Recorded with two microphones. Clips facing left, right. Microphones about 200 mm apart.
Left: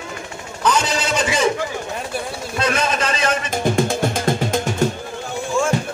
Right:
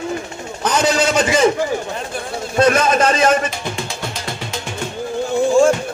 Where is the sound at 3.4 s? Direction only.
45° left (ahead or behind).